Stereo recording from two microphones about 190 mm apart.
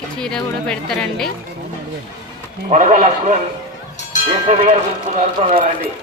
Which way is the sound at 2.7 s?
35° right (ahead or behind).